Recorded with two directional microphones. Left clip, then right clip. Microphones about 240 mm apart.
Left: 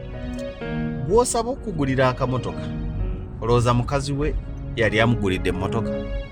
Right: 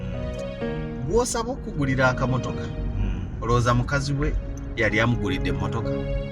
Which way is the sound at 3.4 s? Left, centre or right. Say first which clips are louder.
Left 2 dB; left.